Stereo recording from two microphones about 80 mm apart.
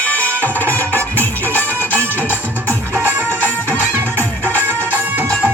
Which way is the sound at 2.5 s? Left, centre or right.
Right.